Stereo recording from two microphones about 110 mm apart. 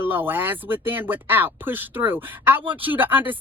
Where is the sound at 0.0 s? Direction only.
20° right (ahead or behind).